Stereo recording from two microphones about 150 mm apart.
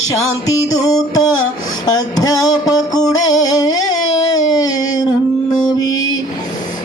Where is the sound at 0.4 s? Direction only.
25° left (ahead or behind).